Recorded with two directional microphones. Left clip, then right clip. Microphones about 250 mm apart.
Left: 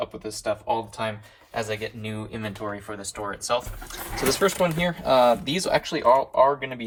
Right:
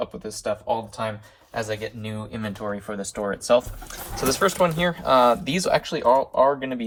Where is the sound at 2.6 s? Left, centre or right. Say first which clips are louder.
Right 4 dB; left.